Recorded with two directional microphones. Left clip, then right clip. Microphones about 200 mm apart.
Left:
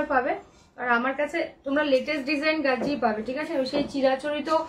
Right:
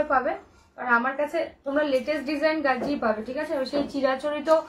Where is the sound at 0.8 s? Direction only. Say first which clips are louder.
Right 1 dB; 15° left (ahead or behind).